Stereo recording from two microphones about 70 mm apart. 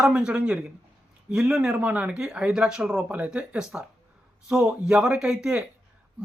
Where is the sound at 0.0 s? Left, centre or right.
Centre.